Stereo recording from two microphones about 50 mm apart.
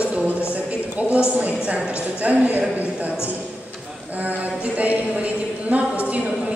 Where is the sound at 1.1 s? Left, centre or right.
Right.